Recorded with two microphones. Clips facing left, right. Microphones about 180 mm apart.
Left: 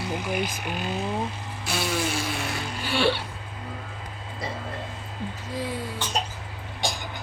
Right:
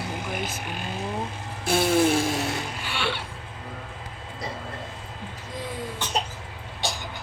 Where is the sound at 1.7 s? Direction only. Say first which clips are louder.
Right 7 dB; 55° right (ahead or behind).